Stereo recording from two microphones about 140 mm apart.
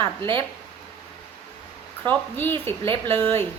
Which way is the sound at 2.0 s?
15° left (ahead or behind).